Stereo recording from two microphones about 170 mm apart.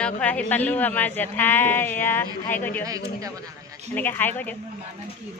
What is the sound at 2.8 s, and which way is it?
Speech, 20° right (ahead or behind).